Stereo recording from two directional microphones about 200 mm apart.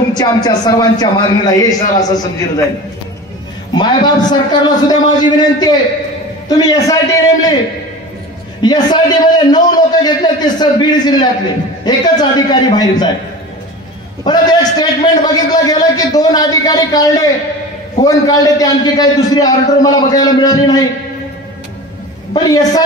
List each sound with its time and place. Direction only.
0.2 s a man's voice: 20° left (ahead or behind)
3.7 s a man's voice: 20° left (ahead or behind)
8.6 s a man's voice: 20° left (ahead or behind)
14.2 s a man's voice: 20° left (ahead or behind)
22.3 s a man's voice: 20° left (ahead or behind)